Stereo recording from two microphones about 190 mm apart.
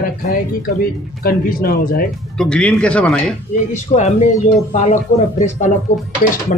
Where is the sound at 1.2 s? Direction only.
50° left (ahead or behind).